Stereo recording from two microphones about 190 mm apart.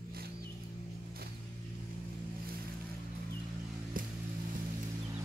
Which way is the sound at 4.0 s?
45° right (ahead or behind).